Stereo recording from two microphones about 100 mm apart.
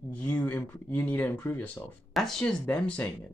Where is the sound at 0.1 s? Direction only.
15° left (ahead or behind).